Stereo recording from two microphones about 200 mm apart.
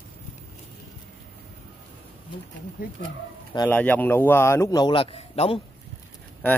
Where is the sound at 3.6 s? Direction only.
10° left (ahead or behind); by 5.6 s 30° left (ahead or behind).